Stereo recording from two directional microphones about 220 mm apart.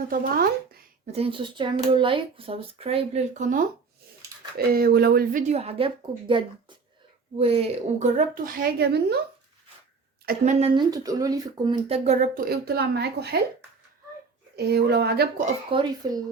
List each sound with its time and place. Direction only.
0.1 s speech: 40° right (ahead or behind)
1.0 s speech: 25° right (ahead or behind); by 9.1 s 50° right (ahead or behind)
10.2 s speech: 35° right (ahead or behind)
10.8 s speech: 15° right (ahead or behind)
12.5 s a woman's voice: 45° right (ahead or behind)
14.5 s a woman's voice: 45° right (ahead or behind)
15.7 s speech: 20° right (ahead or behind)